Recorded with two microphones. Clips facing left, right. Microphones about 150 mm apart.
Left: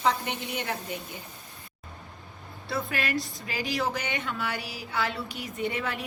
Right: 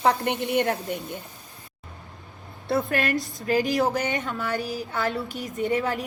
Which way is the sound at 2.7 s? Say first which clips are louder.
Right 6 dB; 50° right (ahead or behind).